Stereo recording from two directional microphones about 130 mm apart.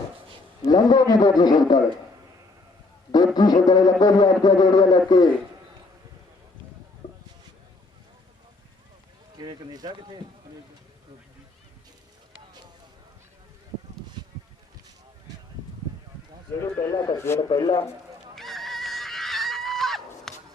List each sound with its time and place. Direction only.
0.7 s a man's voice: 30° left (ahead or behind)
3.3 s a man's voice: 30° left (ahead or behind)
9.4 s speech: 30° right (ahead or behind)
14.2 s bee: 35° right (ahead or behind)
16.6 s speech: 25° left (ahead or behind)
17.5 s a man's voice: 40° left (ahead or behind)
18.3 s fowl: centre (ahead or behind)
20.3 s shuffle: 5° left (ahead or behind)